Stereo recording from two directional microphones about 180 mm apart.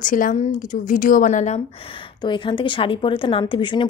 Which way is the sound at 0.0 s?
45° left (ahead or behind).